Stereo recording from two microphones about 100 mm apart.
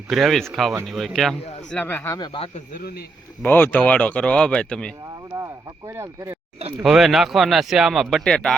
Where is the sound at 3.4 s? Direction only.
20° left (ahead or behind).